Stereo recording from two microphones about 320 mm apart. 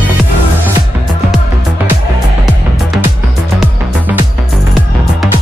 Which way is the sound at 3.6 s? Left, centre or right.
Centre.